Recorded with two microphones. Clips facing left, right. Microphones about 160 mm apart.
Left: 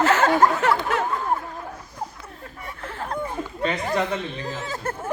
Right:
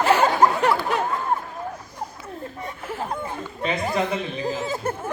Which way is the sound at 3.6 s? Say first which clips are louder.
Even; 10° right (ahead or behind).